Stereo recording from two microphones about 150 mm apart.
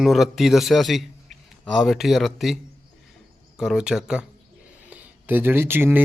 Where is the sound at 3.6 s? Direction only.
5° right (ahead or behind).